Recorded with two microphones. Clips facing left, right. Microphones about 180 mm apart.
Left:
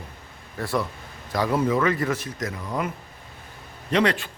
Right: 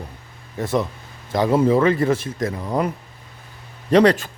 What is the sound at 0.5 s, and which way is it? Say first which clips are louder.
A man's voice: right 5 dB; 20° right (ahead or behind).